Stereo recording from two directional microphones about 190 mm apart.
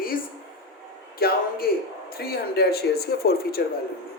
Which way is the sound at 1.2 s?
50° left (ahead or behind).